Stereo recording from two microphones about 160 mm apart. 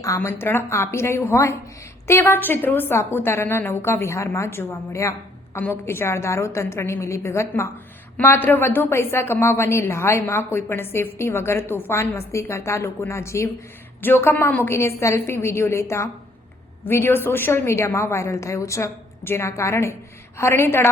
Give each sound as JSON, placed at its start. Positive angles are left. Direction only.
{"t": 0.0, "sound": "a woman's voice", "side_deg": 15}